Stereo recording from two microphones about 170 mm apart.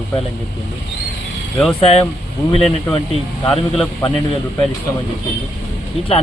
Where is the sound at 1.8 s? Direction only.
35° left (ahead or behind).